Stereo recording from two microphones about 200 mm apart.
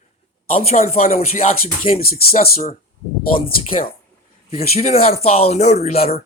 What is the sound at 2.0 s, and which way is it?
Speech, 50° left (ahead or behind).